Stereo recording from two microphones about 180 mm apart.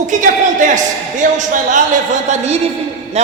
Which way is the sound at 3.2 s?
35° right (ahead or behind).